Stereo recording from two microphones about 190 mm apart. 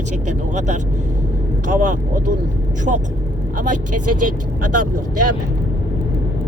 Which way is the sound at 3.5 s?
45° right (ahead or behind).